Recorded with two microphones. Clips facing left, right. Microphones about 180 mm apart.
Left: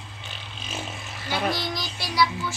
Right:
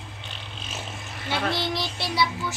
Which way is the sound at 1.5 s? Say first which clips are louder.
Right 1 dB; 25° right (ahead or behind).